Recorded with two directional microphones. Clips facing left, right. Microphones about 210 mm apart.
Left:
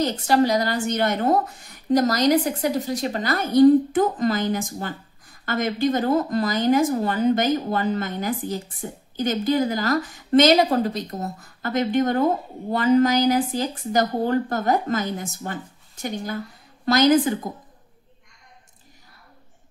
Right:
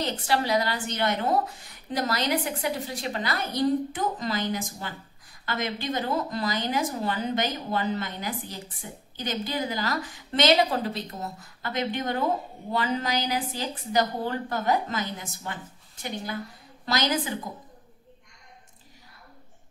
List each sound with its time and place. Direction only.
0.0 s a woman's voice: 45° left (ahead or behind)
16.8 s a woman's voice: 50° left (ahead or behind)